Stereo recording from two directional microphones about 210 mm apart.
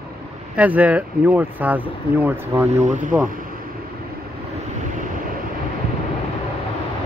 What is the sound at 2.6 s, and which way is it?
Speech, 35° right (ahead or behind).